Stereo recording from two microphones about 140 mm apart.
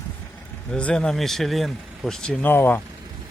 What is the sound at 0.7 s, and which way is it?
Speech, 5° left (ahead or behind).